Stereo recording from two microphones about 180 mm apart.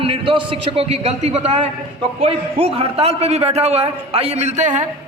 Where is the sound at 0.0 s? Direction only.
30° right (ahead or behind).